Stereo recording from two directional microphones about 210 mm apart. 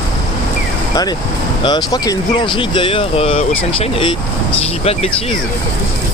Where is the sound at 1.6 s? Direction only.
20° left (ahead or behind).